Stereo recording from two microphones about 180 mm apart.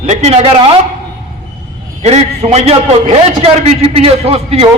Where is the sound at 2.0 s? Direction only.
35° right (ahead or behind).